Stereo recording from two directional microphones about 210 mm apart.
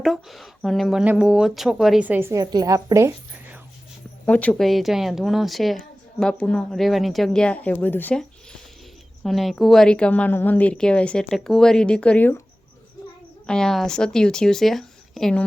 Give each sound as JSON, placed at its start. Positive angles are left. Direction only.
{"t": 0.0, "sound": "a woman's voice", "side_deg": 0}
{"t": 4.3, "sound": "a woman's voice", "side_deg": 5}
{"t": 13.5, "sound": "a woman's voice", "side_deg": 0}